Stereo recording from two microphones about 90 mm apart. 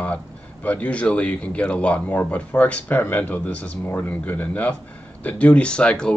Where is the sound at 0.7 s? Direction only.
15° left (ahead or behind).